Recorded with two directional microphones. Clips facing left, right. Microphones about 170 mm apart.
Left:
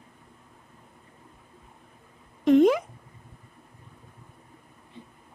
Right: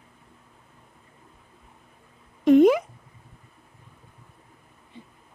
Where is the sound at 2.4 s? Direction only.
5° right (ahead or behind).